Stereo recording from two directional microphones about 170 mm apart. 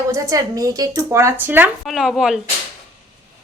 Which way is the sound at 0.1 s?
20° right (ahead or behind).